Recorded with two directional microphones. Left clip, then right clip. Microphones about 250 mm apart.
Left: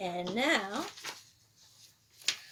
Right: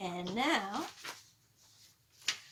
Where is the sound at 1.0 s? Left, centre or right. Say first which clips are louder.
Left 3 dB; centre.